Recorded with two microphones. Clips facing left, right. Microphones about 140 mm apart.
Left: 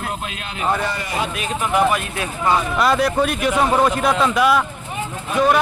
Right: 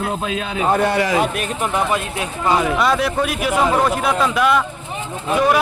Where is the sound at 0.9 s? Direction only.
90° right.